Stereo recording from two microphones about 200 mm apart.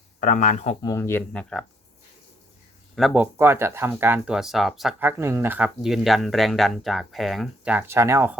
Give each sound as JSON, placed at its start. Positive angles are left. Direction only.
{"t": 0.2, "sound": "speech", "side_deg": 40}
{"t": 0.8, "sound": "speech", "side_deg": 15}
{"t": 2.9, "sound": "speech", "side_deg": 0}
{"t": 3.3, "sound": "speech", "side_deg": -10}